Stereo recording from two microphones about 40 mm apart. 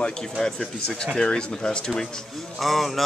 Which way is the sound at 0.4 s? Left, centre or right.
Centre.